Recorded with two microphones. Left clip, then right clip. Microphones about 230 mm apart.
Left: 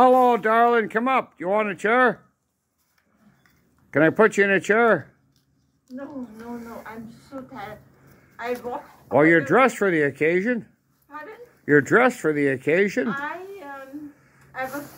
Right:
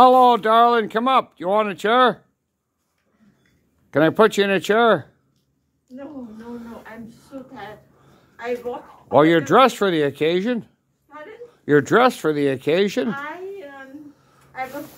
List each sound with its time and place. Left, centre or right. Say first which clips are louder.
0.0 s speech: right 4 dB; centre
3.9 s speech: right 2 dB; centre
9.1 s speech: right 3 dB; right